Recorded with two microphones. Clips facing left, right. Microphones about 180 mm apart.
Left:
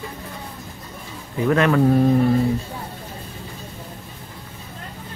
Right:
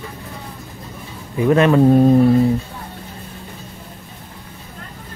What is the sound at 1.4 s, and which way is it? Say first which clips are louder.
Speech: right 4 dB; 20° right (ahead or behind).